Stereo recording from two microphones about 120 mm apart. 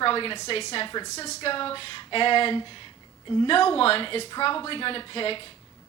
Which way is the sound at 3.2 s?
35° left (ahead or behind).